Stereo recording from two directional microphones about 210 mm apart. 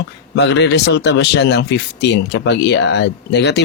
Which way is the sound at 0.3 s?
55° left (ahead or behind).